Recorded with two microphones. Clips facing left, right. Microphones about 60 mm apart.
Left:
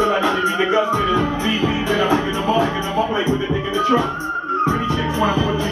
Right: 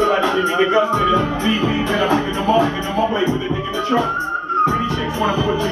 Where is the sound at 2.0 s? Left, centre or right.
Centre.